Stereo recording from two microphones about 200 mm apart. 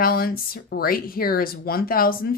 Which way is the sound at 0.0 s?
50° left (ahead or behind).